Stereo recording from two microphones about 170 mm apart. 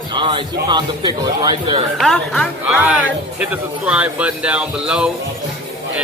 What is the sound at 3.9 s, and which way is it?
Speech, 5° right (ahead or behind).